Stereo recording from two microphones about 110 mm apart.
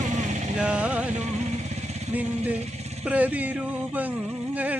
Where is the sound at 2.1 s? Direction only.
15° right (ahead or behind).